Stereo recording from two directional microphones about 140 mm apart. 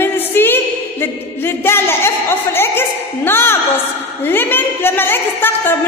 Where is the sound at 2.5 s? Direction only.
15° left (ahead or behind).